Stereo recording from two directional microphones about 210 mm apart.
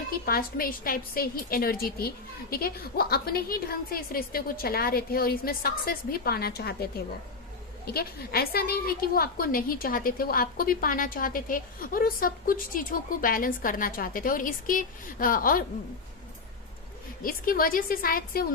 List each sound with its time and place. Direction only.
0.3 s a woman's voice: 45° left (ahead or behind)
7.9 s a woman's voice: 45° left (ahead or behind)
17.2 s a woman's voice: 45° left (ahead or behind)